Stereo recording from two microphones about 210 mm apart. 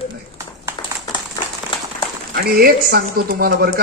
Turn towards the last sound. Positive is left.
turn(degrees=-45)  # may be behind; listen again after turning